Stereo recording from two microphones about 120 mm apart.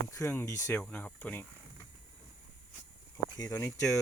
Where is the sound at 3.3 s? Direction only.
30° left (ahead or behind).